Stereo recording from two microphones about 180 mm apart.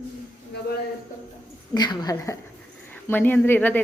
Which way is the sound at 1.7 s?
25° left (ahead or behind).